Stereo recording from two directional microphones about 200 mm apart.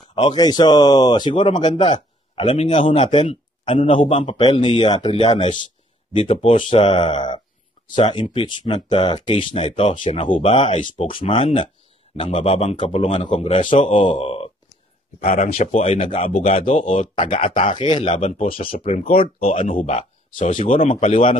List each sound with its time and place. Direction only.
0.1 s speech: 25° left (ahead or behind)
10.7 s speech: 40° left (ahead or behind)
11.1 s speech: 25° left (ahead or behind)
15.1 s speech: 40° left (ahead or behind)
17.3 s speech: 40° left (ahead or behind)
17.6 s speech: 25° left (ahead or behind)